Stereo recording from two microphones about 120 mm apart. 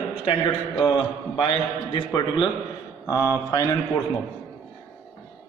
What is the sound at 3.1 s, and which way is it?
Speech, 25° left (ahead or behind).